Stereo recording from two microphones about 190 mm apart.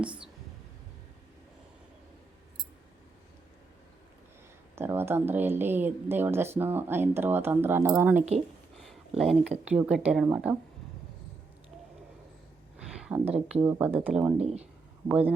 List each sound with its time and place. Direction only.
4.7 s speech: 15° right (ahead or behind)
8.8 s a sound: centre (ahead or behind)
9.6 s speech: 5° right (ahead or behind)
12.9 s a sound: 5° right (ahead or behind)
13.5 s speech: 10° right (ahead or behind)
14.3 s speech: 35° right (ahead or behind)
15.0 s speech: 10° right (ahead or behind)